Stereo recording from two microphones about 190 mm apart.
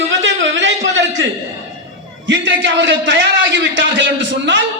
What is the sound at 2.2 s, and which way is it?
A man's voice, 75° right (ahead or behind).